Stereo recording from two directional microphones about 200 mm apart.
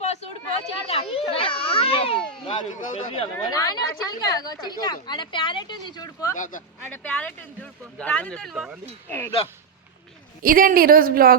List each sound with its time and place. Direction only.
0.0 s children playing: 35° left (ahead or behind)
2.6 s speech: 25° left (ahead or behind)
6.3 s speech: 40° left (ahead or behind)
6.9 s speech: 5° left (ahead or behind)
9.0 s speech: 10° left (ahead or behind)
10.4 s a woman's voice: 45° right (ahead or behind)